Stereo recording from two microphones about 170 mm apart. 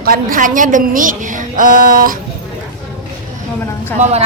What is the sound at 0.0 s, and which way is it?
A woman's voice, 55° right (ahead or behind).